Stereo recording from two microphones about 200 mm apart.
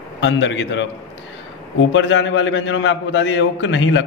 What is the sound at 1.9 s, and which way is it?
A man's voice, 70° left (ahead or behind).